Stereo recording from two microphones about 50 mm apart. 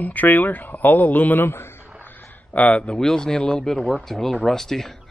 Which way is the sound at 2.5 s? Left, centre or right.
Left.